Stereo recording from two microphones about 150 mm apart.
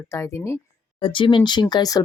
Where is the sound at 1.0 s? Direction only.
35° left (ahead or behind).